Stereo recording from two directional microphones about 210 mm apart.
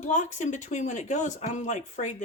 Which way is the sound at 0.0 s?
35° left (ahead or behind).